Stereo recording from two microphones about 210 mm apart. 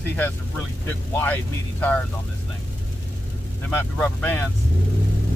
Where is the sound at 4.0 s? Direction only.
10° left (ahead or behind).